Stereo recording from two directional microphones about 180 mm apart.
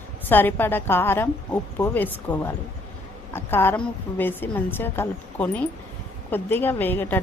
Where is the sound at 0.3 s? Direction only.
10° left (ahead or behind).